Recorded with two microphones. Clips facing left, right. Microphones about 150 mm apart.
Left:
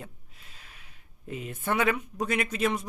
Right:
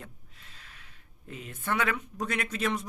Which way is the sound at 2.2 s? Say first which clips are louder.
Left 4 dB; 5° left (ahead or behind).